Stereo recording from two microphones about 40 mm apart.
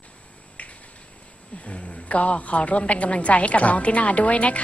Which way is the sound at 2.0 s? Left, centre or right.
Left.